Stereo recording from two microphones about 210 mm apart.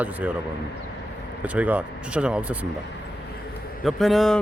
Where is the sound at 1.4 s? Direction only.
5° right (ahead or behind).